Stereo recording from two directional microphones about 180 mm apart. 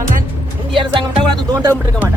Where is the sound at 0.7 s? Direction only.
30° right (ahead or behind).